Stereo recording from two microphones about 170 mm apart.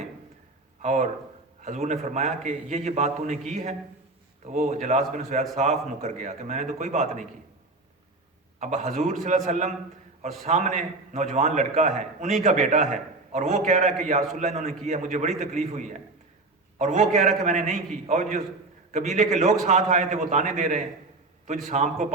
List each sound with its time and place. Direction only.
0.8 s a man's voice: 45° right (ahead or behind)
8.5 s a man's voice: 45° right (ahead or behind)